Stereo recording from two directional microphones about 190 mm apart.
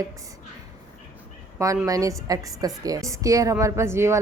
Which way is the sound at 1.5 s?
15° right (ahead or behind).